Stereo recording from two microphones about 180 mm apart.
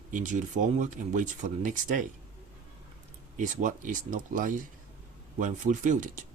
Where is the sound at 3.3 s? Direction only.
45° right (ahead or behind).